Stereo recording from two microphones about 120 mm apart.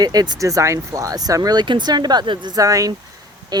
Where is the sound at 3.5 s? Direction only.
35° right (ahead or behind).